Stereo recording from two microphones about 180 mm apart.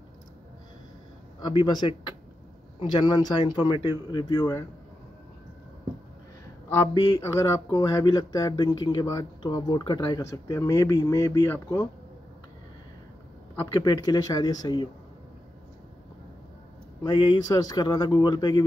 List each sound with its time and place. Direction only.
1.4 s speech: 25° left (ahead or behind)
2.8 s speech: 20° left (ahead or behind)
6.7 s speech: 20° left (ahead or behind)
13.7 s speech: 20° left (ahead or behind)
17.0 s speech: 25° left (ahead or behind)